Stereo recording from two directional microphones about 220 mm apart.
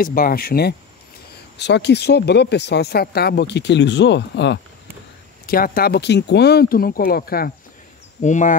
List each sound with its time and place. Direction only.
0.0 s speech: 40° left (ahead or behind)